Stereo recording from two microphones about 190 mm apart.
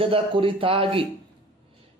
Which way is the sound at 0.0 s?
30° right (ahead or behind).